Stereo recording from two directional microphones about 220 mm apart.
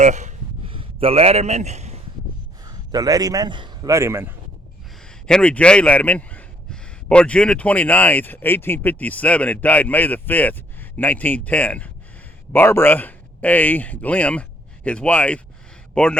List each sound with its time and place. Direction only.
0.0 s a sound: 35° right (ahead or behind)
2.6 s a man's voice: 15° right (ahead or behind)
5.0 s a man's voice: 5° left (ahead or behind)